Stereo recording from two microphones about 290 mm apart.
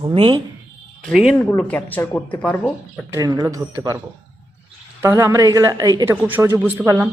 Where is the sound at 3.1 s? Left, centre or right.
Centre.